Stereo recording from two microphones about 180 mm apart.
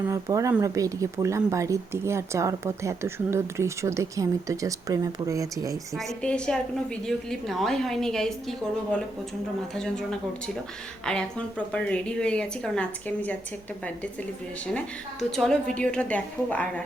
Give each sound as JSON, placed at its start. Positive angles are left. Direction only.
{"t": 0.1, "sound": "speech", "side_deg": -15}
{"t": 6.2, "sound": "a woman's voice", "side_deg": 5}
{"t": 14.7, "sound": "a woman's voice", "side_deg": 0}